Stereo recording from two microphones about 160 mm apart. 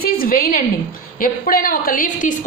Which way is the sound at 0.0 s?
65° left (ahead or behind).